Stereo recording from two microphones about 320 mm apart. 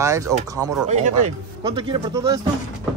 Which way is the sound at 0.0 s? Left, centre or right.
Centre.